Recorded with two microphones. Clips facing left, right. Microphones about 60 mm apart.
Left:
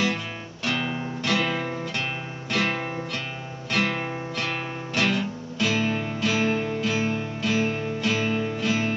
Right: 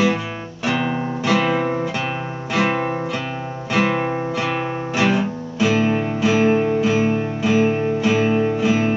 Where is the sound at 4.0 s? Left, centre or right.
Right.